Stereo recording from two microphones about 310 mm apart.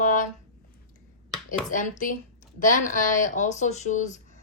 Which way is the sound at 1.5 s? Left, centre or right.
Left.